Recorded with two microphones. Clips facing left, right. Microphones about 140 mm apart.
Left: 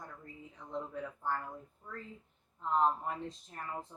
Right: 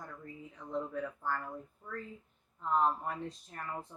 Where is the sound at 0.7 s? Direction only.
25° left (ahead or behind).